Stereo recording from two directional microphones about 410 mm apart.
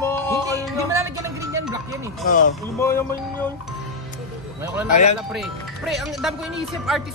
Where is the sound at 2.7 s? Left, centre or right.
Centre.